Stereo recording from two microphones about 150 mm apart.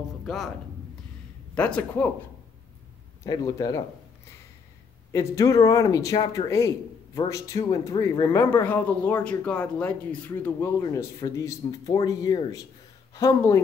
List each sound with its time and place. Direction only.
0.2 s speech: centre (ahead or behind)
1.5 s speech: 5° left (ahead or behind)
3.3 s speech: 25° left (ahead or behind)
5.1 s speech: 20° left (ahead or behind)